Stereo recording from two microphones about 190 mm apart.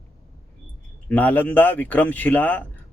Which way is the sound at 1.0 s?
10° left (ahead or behind).